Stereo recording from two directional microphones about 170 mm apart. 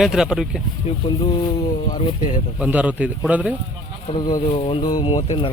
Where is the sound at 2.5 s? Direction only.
10° right (ahead or behind).